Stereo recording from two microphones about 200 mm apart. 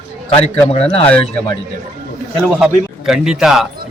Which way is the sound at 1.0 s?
5° left (ahead or behind).